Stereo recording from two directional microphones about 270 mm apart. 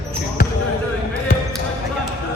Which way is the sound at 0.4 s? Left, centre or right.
Left.